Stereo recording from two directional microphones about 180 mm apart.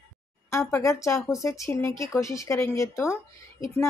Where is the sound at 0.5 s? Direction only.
15° left (ahead or behind).